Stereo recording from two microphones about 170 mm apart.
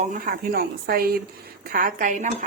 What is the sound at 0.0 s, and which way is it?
Speech, 50° right (ahead or behind).